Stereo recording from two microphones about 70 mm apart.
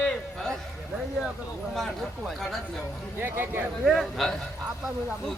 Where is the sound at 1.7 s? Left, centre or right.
Centre.